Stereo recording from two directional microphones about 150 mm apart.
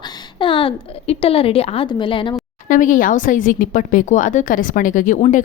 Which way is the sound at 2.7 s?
60° left (ahead or behind).